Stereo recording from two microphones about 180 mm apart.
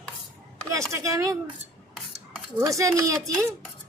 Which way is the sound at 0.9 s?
15° right (ahead or behind).